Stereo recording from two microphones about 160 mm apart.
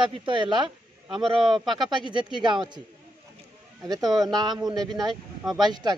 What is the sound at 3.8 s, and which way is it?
Speech, 25° right (ahead or behind).